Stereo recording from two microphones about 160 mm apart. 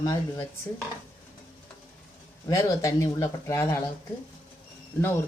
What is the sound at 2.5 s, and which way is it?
Speech, 20° left (ahead or behind).